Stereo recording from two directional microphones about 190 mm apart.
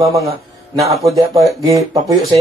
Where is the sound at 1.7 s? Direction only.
15° right (ahead or behind).